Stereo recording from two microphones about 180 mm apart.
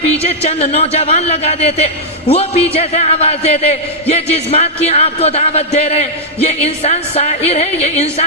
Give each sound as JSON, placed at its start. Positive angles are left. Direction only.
{"t": 0.2, "sound": "a man's voice", "side_deg": 35}